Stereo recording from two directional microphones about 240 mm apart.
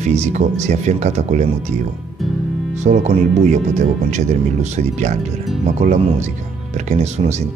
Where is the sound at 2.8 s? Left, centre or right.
Right.